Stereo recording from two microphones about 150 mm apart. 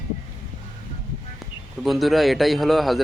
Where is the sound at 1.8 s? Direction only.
Centre (ahead or behind).